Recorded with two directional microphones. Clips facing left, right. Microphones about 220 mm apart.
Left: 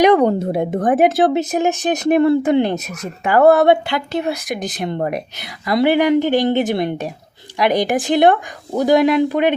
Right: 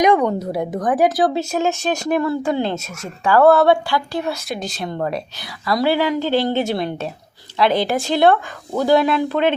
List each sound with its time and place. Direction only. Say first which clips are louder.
0.1 s speech: left 3 dB; 35° left (ahead or behind); by 9.5 s 15° left (ahead or behind)